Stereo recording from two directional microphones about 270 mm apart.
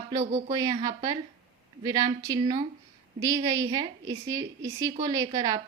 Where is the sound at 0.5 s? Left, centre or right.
Centre.